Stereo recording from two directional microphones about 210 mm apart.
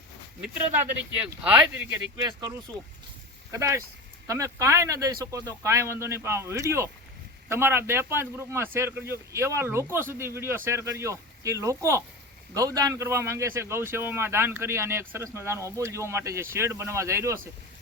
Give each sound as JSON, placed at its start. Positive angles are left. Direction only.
{"t": 1.1, "sound": "a man's voice", "side_deg": -5}
{"t": 2.2, "sound": "a man's voice", "side_deg": -20}